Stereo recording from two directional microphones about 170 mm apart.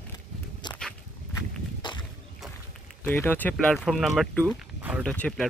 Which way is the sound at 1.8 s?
30° left (ahead or behind).